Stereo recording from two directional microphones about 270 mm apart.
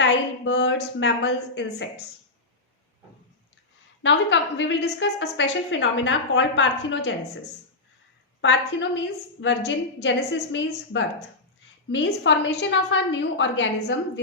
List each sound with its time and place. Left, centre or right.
0.0 s a woman's voice: left
4.0 s a woman's voice: left
8.4 s a woman's voice: left